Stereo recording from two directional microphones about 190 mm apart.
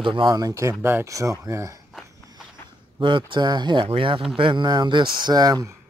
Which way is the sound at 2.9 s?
25° right (ahead or behind).